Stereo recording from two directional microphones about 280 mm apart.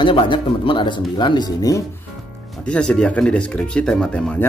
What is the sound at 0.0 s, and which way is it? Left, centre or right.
Speech, centre.